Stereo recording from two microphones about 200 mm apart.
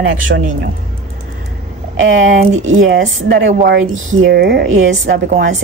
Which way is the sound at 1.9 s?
75° right (ahead or behind).